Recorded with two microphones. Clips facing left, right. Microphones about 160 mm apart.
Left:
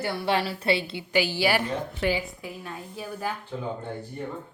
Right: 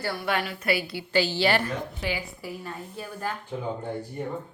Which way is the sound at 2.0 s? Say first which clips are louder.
Left 6 dB; 60° left (ahead or behind).